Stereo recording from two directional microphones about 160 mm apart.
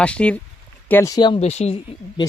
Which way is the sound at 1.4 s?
40° left (ahead or behind).